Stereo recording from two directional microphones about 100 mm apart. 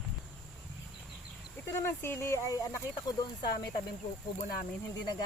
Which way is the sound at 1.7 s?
25° left (ahead or behind).